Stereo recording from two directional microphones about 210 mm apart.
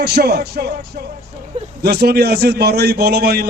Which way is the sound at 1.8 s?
50° right (ahead or behind).